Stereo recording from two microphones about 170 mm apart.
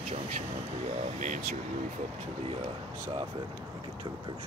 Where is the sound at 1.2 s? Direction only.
50° right (ahead or behind).